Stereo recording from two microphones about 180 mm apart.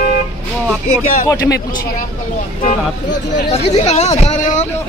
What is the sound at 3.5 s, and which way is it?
Speech, 35° left (ahead or behind).